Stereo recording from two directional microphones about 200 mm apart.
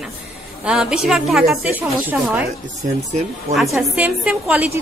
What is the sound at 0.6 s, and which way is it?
A woman's voice, 5° right (ahead or behind).